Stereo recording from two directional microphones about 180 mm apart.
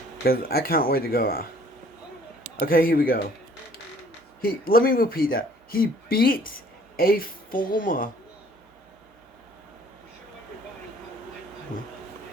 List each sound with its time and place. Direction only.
0.3 s speech: 60° left (ahead or behind)
2.6 s speech: 55° left (ahead or behind)
4.4 s speech: 55° left (ahead or behind)